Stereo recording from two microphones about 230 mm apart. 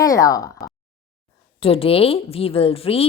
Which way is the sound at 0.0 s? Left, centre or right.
Centre.